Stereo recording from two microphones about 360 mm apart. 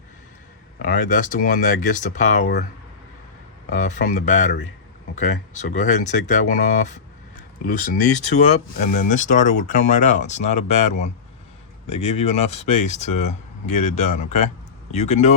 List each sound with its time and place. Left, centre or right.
0.8 s speech: left
3.7 s speech: centre